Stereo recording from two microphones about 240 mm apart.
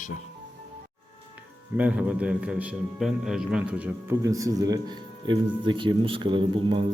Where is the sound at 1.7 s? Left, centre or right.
Centre.